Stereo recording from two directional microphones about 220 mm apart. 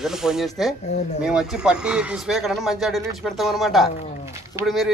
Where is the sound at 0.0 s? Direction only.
Centre (ahead or behind).